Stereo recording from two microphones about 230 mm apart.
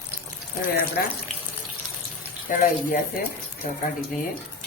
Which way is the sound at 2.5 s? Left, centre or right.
Left.